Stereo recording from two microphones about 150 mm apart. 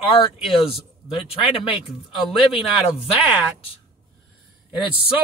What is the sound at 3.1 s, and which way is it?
Speech, 40° left (ahead or behind).